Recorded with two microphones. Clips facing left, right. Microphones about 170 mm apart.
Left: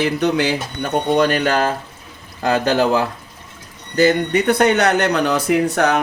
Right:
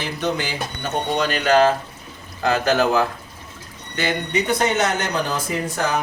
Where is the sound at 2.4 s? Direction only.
35° left (ahead or behind).